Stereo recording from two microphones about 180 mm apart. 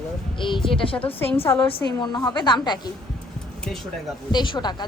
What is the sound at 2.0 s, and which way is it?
Speech, 25° left (ahead or behind).